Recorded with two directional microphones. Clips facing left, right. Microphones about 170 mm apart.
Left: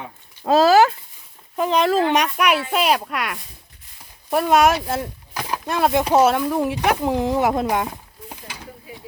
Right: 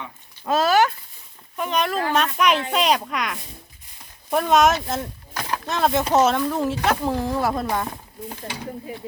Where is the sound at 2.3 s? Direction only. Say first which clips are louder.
Left 1 dB; 10° left (ahead or behind).